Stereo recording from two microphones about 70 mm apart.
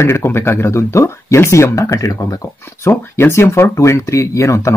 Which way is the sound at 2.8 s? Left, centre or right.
Left.